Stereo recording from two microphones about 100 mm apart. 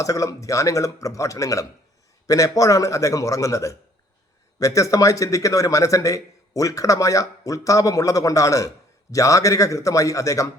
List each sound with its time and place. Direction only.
0.0 s speech: 35° left (ahead or behind)